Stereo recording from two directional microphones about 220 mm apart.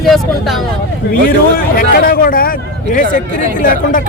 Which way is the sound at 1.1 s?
40° left (ahead or behind).